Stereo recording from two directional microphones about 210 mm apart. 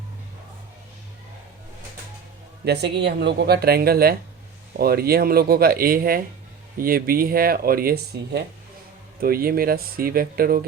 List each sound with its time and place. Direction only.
2.6 s speech: 55° right (ahead or behind)